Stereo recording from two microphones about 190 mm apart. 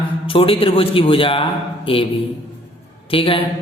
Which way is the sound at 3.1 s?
30° left (ahead or behind).